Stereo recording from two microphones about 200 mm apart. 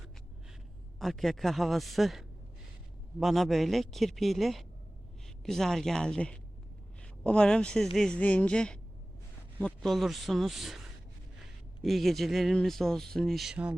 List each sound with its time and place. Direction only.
0.9 s speech: centre (ahead or behind)